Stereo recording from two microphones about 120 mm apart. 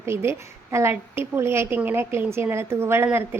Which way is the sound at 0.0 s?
20° right (ahead or behind).